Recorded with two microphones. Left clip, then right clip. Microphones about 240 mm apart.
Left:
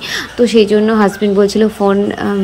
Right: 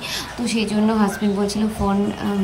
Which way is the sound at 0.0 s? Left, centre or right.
Centre.